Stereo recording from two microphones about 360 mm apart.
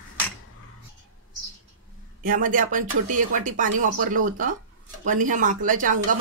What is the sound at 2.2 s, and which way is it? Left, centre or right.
Speech, right.